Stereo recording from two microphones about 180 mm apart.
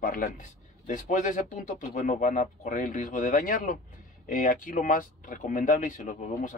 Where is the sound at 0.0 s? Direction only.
50° left (ahead or behind).